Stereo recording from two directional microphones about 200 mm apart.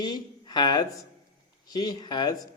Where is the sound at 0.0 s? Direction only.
20° left (ahead or behind).